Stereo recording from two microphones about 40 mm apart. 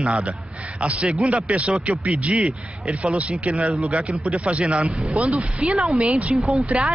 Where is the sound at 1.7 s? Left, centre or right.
Right.